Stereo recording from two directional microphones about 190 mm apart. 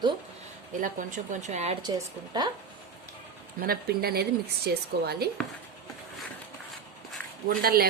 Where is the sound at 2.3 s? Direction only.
20° right (ahead or behind).